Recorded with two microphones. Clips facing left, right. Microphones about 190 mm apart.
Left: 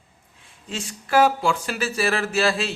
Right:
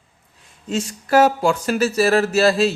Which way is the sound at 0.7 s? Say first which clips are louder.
Right 5 dB; 45° right (ahead or behind).